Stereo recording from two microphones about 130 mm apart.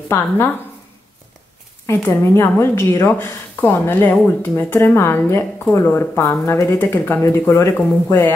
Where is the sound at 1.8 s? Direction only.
20° left (ahead or behind).